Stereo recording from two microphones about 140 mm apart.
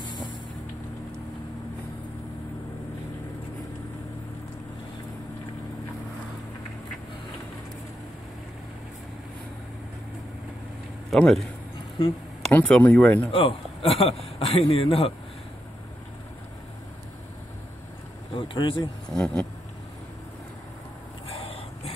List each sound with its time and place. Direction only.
0.0 s vehicle: 30° left (ahead or behind)
11.1 s speech: 5° left (ahead or behind)
12.5 s speech: 10° left (ahead or behind)
13.3 s a man's voice: 40° left (ahead or behind)
18.3 s speech: 35° left (ahead or behind)
19.0 s speech: 5° left (ahead or behind)
21.3 s a sound: 45° left (ahead or behind)